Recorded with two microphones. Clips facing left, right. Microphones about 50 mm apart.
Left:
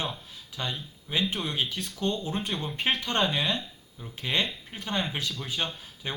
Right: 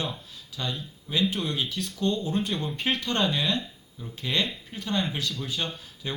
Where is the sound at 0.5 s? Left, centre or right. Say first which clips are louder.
Right 1 dB; left.